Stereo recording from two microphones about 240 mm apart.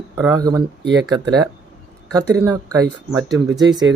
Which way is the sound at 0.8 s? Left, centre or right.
Right.